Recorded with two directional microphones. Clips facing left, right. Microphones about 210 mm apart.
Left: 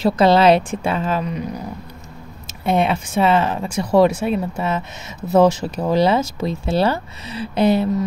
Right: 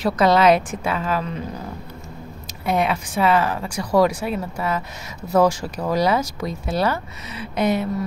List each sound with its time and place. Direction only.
0.0 s speech: 30° left (ahead or behind)
2.4 s speech: 25° left (ahead or behind)